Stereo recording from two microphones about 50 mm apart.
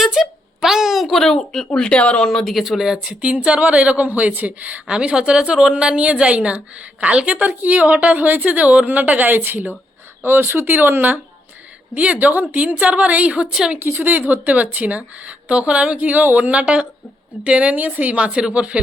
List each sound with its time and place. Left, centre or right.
0.0 s a sound: centre; by 2.3 s left
2.3 s speech: centre
3.2 s a woman's voice: right
4.9 s a woman's voice: centre; by 9.7 s right
10.2 s speech: right
11.9 s a woman's voice: right
13.7 s a woman's voice: right